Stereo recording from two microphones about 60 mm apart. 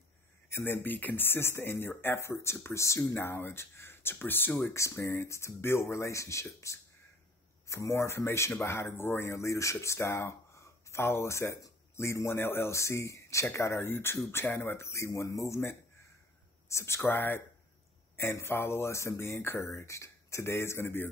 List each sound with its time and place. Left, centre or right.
0.5 s speech: left
4.6 s speech: left
13.6 s speech: left
14.8 s speech: left
16.6 s speech: left
18.1 s speech: left